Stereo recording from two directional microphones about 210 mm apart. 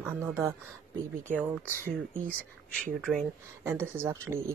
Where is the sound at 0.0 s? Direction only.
10° right (ahead or behind).